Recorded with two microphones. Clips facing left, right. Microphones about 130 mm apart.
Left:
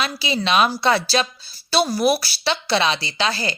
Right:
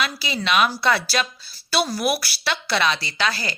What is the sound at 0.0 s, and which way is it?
Speech, 30° left (ahead or behind).